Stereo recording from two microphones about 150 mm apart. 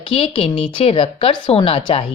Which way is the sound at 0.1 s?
40° left (ahead or behind).